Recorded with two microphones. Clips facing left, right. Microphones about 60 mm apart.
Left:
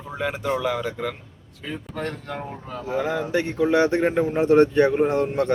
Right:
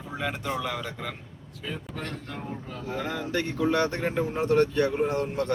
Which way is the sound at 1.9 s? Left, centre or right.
Left.